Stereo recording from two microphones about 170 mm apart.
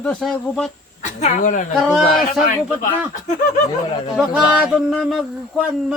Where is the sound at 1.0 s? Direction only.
45° left (ahead or behind).